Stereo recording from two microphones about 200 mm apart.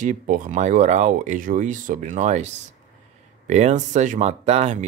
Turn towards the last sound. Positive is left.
turn(degrees=-35)  # may be behind; listen again after turning